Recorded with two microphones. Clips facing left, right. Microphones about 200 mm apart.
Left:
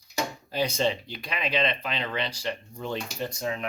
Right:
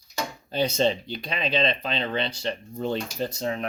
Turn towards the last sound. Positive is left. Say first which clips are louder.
# right 3 dB
turn(degrees=-35)  # may be behind; listen again after turning